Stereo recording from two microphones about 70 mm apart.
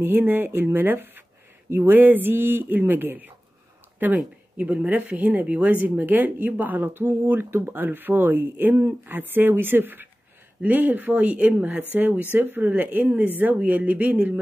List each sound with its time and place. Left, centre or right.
0.0 s speech: right
4.6 s speech: right